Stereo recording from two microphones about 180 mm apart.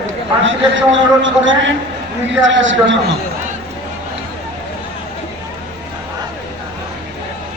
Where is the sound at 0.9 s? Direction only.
90° right.